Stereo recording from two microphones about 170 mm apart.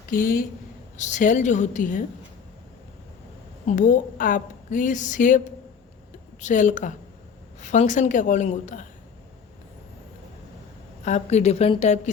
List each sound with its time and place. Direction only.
0.1 s a woman's voice: 55° left (ahead or behind)
3.7 s a woman's voice: 50° left (ahead or behind)
6.4 s a woman's voice: 50° left (ahead or behind)
11.0 s a woman's voice: 40° left (ahead or behind)